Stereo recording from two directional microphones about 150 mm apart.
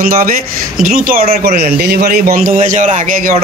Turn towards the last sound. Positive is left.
turn(degrees=-55)  # may be behind; listen again after turning